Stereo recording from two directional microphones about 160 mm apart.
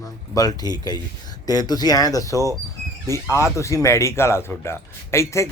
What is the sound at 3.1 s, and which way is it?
A man's voice, 20° left (ahead or behind).